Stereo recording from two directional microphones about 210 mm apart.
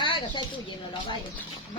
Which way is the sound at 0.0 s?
20° left (ahead or behind).